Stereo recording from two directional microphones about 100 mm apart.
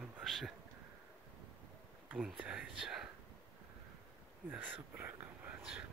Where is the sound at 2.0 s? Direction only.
10° right (ahead or behind).